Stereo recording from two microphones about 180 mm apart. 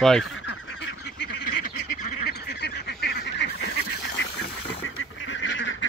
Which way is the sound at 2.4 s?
65° left (ahead or behind).